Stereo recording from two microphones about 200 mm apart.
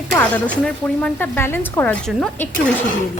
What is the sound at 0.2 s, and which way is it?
Sizzle, 5° left (ahead or behind).